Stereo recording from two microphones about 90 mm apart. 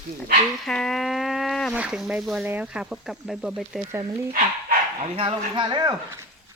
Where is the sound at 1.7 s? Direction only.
10° right (ahead or behind).